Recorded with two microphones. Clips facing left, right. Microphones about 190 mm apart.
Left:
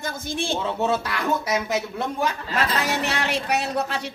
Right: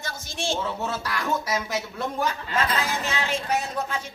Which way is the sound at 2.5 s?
75° left (ahead or behind).